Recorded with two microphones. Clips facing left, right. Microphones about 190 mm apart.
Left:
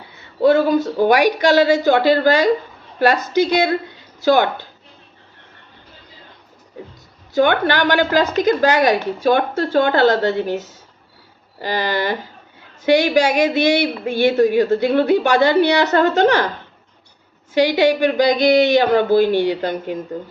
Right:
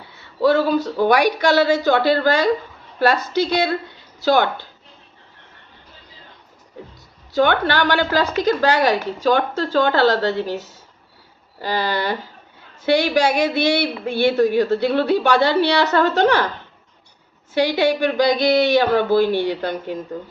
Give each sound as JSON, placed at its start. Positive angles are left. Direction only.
{"t": 0.3, "sound": "a woman's voice", "side_deg": 15}
{"t": 7.3, "sound": "a woman's voice", "side_deg": 15}
{"t": 17.7, "sound": "a woman's voice", "side_deg": 15}